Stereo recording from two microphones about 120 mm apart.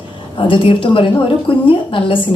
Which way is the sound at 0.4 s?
45° left (ahead or behind).